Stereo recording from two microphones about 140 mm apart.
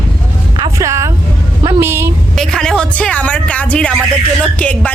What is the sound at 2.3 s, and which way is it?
A woman's voice, 5° left (ahead or behind).